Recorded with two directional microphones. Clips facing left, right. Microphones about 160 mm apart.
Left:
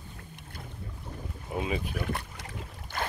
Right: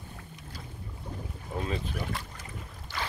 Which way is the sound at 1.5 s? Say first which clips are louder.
Left 2 dB; 10° left (ahead or behind).